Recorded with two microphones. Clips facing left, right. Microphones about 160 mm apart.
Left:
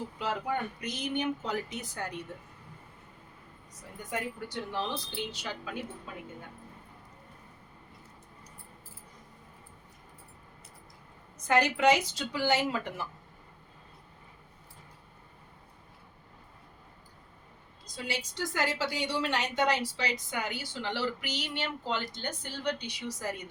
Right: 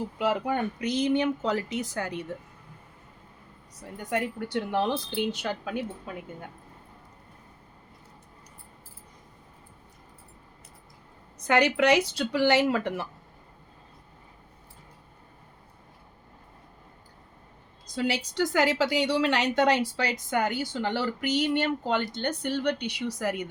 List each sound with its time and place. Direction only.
0.2 s speech: 80° right
4.1 s a woman's voice: 60° right (ahead or behind)
11.4 s a woman's voice: 70° right (ahead or behind)
18.3 s a woman's voice: 85° right; by 23.4 s 65° right (ahead or behind)